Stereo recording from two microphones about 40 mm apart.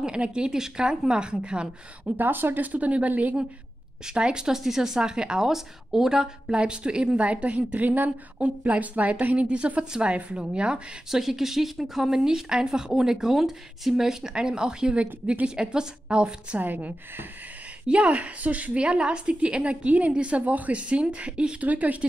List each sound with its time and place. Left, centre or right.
0.0 s a woman's voice: right
2.1 s speech: right
4.0 s a woman's voice: right
4.6 s a woman's voice: centre; by 10.8 s right
11.1 s a woman's voice: centre
16.5 s speech: right
17.8 s a woman's voice: right
21.5 s a woman's voice: right